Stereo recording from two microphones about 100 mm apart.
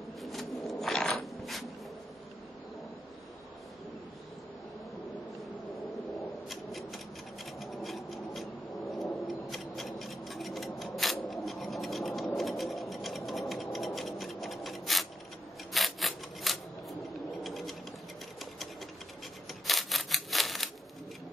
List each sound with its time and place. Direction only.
0.2 s a sound: centre (ahead or behind)
6.5 s rub: centre (ahead or behind)
12.4 s scratch: centre (ahead or behind)
15.7 s scissors: centre (ahead or behind)
17.3 s a sound: centre (ahead or behind)
19.6 s scissors: centre (ahead or behind)